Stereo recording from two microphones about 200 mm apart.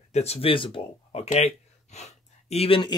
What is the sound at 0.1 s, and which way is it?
Speech, 30° left (ahead or behind).